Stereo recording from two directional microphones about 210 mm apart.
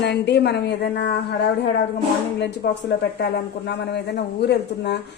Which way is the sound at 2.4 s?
50° left (ahead or behind).